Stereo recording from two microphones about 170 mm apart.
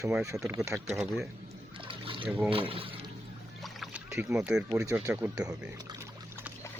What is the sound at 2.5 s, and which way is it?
Speech, 35° right (ahead or behind).